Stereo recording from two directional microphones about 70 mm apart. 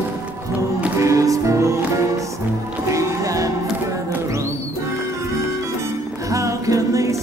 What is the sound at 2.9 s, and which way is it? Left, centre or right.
Music, right.